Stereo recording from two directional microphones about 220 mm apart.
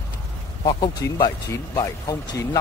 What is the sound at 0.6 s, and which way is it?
Speech, 20° left (ahead or behind).